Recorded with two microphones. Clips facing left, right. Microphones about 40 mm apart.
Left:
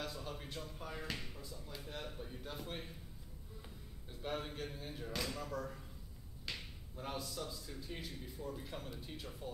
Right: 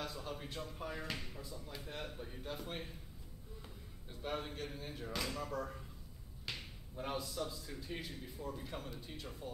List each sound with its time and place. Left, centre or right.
0.0 s a man's voice: centre
0.6 s speech: centre
7.0 s a man's voice: centre
8.0 s speech: centre